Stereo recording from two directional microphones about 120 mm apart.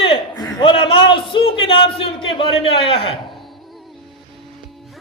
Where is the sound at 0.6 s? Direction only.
50° left (ahead or behind).